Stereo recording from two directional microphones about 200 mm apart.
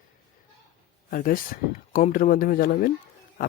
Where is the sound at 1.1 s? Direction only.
45° left (ahead or behind).